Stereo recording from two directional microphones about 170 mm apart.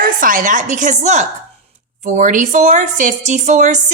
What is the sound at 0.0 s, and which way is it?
A woman's voice, 55° right (ahead or behind).